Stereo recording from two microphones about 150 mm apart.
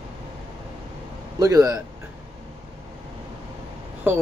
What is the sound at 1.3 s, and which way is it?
Speech, 25° right (ahead or behind).